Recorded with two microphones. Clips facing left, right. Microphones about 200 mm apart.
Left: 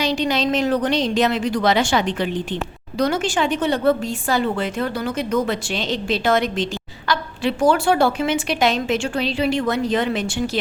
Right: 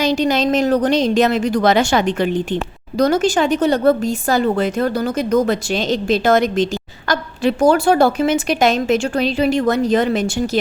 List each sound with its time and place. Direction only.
0.0 s a woman's voice: 45° right (ahead or behind)